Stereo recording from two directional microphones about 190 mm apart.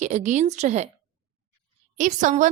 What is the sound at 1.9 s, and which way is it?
Speech, 40° right (ahead or behind).